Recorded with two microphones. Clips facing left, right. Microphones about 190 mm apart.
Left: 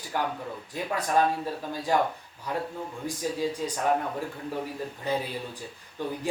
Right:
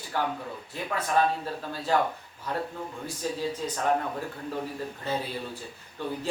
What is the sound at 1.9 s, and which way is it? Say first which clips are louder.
Speech: even; 15° left (ahead or behind).